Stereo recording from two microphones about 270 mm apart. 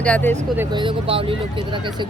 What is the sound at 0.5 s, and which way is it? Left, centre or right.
Speech, centre.